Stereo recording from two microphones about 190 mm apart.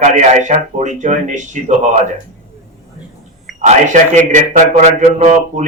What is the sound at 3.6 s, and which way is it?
A man's voice, 40° right (ahead or behind).